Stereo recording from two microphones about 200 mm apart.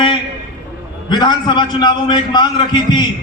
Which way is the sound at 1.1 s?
20° left (ahead or behind).